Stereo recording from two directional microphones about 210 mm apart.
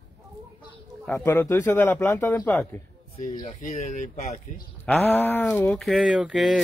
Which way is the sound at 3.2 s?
40° left (ahead or behind).